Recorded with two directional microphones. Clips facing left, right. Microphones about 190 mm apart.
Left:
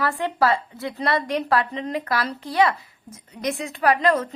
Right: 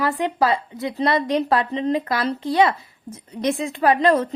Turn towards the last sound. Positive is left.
turn(degrees=-30)  # may be behind; listen again after turning